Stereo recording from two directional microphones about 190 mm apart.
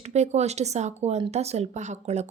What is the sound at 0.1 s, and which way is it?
Speech, 35° right (ahead or behind).